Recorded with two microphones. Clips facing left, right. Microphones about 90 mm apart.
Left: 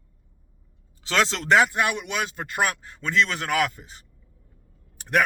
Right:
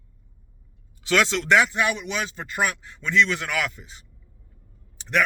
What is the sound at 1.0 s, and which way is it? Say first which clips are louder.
Speech: right 2 dB; 35° left (ahead or behind).